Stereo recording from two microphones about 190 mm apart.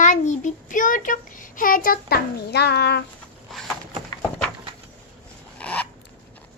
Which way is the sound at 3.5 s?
Centre (ahead or behind).